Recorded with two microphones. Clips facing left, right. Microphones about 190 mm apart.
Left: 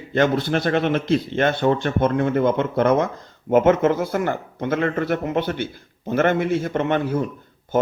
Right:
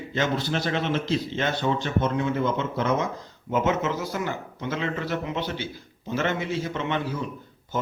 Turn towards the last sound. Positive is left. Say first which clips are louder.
# left 7 dB
turn(degrees=55)  # may be behind; listen again after turning